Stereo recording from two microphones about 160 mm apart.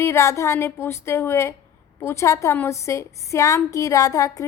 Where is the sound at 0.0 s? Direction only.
15° left (ahead or behind).